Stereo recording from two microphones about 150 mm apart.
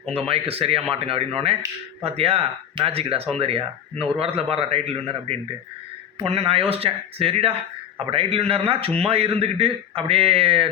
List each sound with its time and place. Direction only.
0.1 s speech: 40° right (ahead or behind)